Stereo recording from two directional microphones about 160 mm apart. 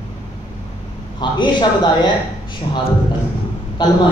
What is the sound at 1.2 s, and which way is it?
Speech, 30° left (ahead or behind).